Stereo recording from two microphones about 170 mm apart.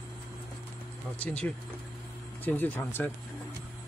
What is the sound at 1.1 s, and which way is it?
Speech, 10° left (ahead or behind).